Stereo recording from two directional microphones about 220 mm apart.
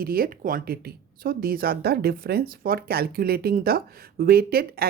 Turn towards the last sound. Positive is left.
turn(degrees=-45)  # may be behind; listen again after turning